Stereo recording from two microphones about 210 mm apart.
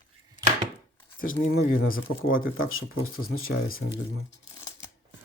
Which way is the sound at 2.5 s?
75° left (ahead or behind).